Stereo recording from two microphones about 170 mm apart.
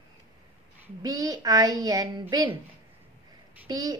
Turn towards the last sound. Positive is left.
turn(degrees=-25)  # may be behind; listen again after turning